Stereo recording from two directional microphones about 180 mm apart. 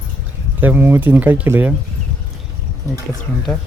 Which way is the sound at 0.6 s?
10° right (ahead or behind).